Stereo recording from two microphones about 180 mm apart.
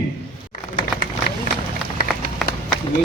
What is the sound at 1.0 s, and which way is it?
Run, 55° left (ahead or behind).